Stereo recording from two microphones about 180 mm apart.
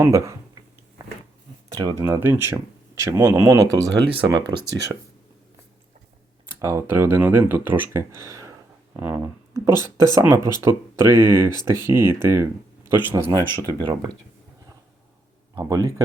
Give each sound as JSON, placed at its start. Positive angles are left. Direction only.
{"t": 0.0, "sound": "a sound", "side_deg": -15}
{"t": 1.7, "sound": "speech", "side_deg": -20}
{"t": 6.6, "sound": "speech", "side_deg": -15}
{"t": 13.3, "sound": "speech", "side_deg": -25}
{"t": 15.5, "sound": "speech", "side_deg": -20}